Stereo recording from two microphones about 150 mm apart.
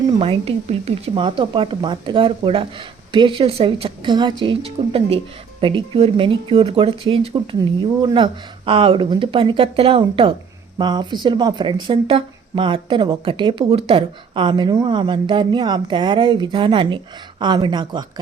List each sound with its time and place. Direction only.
0.1 s speech: 40° right (ahead or behind)